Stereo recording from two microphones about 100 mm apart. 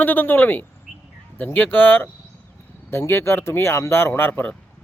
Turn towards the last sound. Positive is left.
turn(degrees=20)  # may be behind; listen again after turning